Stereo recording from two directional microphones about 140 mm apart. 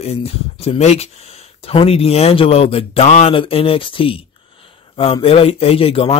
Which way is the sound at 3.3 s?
40° left (ahead or behind).